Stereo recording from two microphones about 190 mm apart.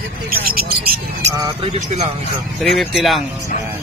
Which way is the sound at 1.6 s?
35° right (ahead or behind).